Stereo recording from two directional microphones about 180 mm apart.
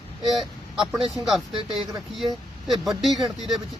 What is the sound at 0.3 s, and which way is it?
Speech, centre (ahead or behind).